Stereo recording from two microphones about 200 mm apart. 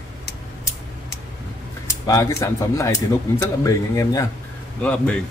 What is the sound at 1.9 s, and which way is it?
A man's voice, 15° left (ahead or behind).